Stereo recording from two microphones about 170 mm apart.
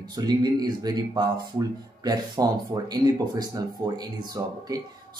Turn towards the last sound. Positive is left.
turn(degrees=-20)  # may be behind; listen again after turning